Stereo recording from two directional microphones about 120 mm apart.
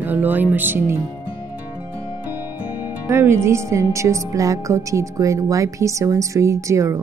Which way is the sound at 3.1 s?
20° right (ahead or behind).